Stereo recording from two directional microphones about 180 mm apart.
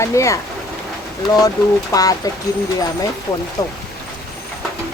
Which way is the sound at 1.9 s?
20° left (ahead or behind).